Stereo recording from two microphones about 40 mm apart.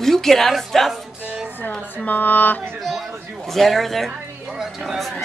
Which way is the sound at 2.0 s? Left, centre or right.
Left.